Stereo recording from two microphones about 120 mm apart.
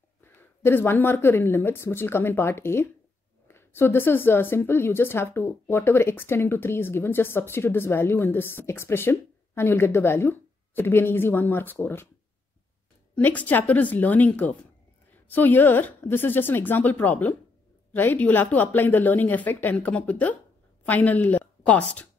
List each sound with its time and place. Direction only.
0.2 s a woman's voice: 20° left (ahead or behind)
13.1 s a woman's voice: 15° left (ahead or behind)